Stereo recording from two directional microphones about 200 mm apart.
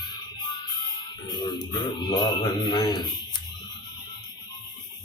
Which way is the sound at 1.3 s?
20° left (ahead or behind).